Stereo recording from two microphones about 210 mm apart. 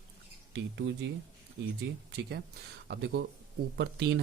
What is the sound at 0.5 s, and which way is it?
Speech, 60° right (ahead or behind).